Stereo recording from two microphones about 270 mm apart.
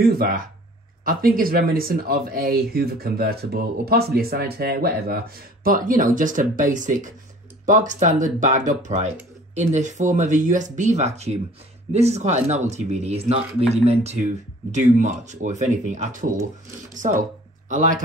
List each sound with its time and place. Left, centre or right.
0.0 s speech: right